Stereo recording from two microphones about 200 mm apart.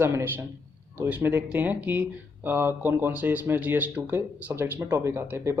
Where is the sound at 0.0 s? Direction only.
10° right (ahead or behind).